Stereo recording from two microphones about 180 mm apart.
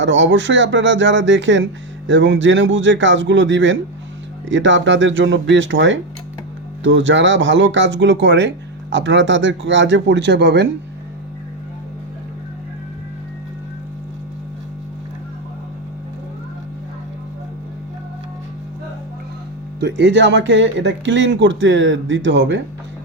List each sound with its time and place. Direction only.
0.0 s speech: 90° right; by 10.7 s 75° right (ahead or behind)
19.8 s speech: 70° right (ahead or behind)